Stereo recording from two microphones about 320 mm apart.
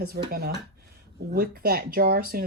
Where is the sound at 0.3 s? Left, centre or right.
Right.